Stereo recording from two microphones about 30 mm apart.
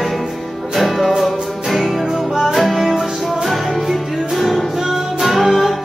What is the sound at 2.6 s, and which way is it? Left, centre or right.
Music, centre.